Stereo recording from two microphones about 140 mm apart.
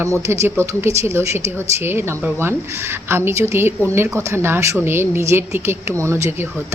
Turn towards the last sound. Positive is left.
turn(degrees=-15)  # may be behind; listen again after turning